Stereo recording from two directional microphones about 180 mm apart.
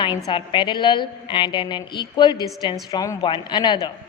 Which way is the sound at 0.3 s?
25° left (ahead or behind).